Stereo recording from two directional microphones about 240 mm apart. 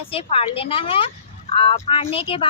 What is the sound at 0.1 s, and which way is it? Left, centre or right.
Speech, left.